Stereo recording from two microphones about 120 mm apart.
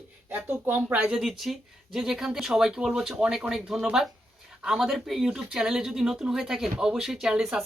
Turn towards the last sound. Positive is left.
turn(degrees=-5)  # may be behind; listen again after turning